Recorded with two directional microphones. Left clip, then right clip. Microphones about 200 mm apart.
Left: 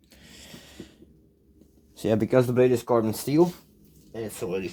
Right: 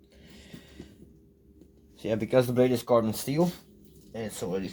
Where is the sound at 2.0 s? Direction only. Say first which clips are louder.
Left 3 dB; 45° left (ahead or behind).